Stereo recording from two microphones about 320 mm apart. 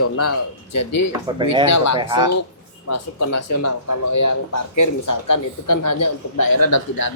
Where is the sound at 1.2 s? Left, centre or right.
Centre.